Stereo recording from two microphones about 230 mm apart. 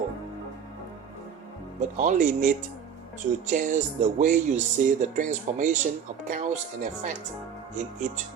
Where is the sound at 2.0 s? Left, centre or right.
Right.